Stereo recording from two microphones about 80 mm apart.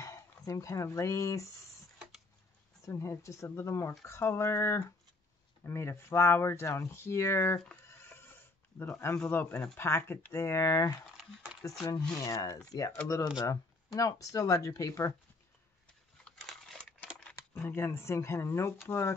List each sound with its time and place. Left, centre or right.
0.0 s speech: left
2.8 s speech: left
7.5 s speech: centre
7.8 s bleat: left
9.3 s speech: left
12.2 s speech: left
16.3 s a sound: centre
17.2 s computer keyboard: centre
17.6 s speech: left